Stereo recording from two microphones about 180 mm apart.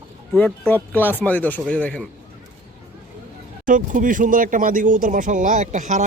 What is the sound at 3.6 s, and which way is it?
Speech, 45° right (ahead or behind).